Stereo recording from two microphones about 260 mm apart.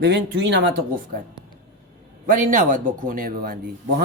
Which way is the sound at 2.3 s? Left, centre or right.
Right.